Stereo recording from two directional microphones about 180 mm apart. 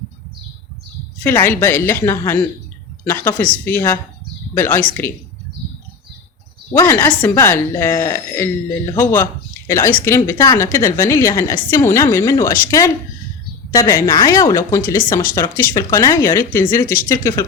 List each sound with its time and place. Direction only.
1.2 s a woman's voice: 10° left (ahead or behind)
6.7 s a woman's voice: 10° left (ahead or behind)